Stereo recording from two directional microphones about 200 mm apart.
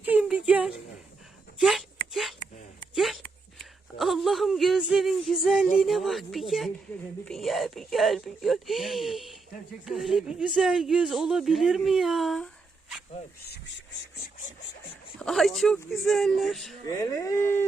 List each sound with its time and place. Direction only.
0.0 s a sound: 5° right (ahead or behind)
5.8 s a man's voice: centre (ahead or behind)
15.2 s a man's voice: centre (ahead or behind)
16.9 s speech: 15° left (ahead or behind)